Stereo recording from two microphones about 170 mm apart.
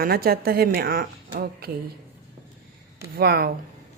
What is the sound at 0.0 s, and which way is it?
A woman's voice, 60° right (ahead or behind).